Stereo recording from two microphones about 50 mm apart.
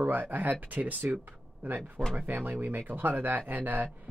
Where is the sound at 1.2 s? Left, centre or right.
Right.